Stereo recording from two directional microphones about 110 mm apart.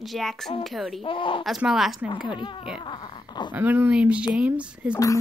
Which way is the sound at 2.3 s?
45° left (ahead or behind).